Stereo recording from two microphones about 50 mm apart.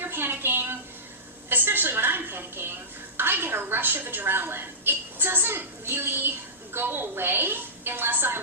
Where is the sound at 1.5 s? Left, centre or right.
Right.